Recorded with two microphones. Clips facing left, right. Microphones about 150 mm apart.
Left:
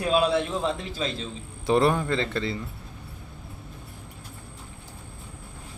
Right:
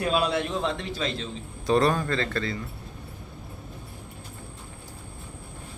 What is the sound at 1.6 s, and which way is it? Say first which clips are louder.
Speech: left 1 dB; 20° left (ahead or behind).